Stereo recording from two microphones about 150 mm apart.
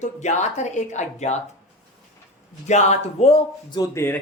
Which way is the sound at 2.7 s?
50° left (ahead or behind).